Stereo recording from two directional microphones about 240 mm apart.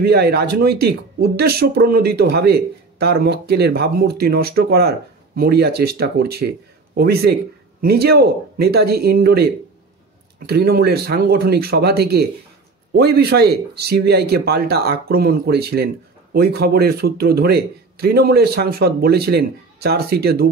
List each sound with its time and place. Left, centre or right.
0.0 s speech: right